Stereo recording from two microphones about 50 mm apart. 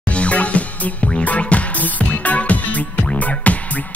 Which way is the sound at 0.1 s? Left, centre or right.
Left.